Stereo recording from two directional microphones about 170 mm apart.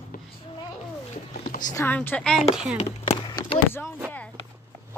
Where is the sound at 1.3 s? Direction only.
55° left (ahead or behind).